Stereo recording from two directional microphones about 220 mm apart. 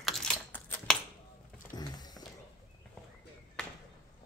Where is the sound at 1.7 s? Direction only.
20° left (ahead or behind).